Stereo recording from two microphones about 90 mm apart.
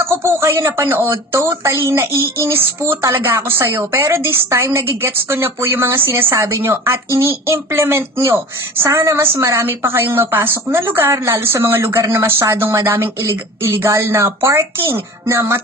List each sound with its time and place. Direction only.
0.0 s speech: 25° right (ahead or behind)